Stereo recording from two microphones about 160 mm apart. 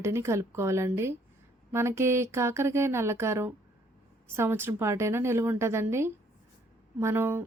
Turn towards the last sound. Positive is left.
turn(degrees=-15)  # may be behind; listen again after turning